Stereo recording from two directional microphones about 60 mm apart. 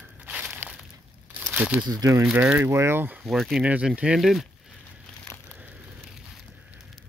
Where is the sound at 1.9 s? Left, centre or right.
Right.